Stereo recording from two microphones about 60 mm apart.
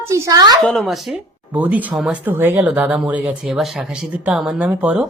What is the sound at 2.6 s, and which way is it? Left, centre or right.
Speech, centre.